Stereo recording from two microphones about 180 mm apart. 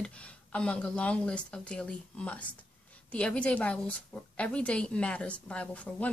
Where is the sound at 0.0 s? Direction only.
5° left (ahead or behind).